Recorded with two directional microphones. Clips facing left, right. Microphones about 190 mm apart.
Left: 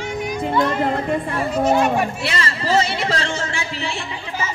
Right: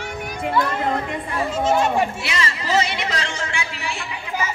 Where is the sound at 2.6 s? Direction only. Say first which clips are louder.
Left 3 dB; 30° left (ahead or behind).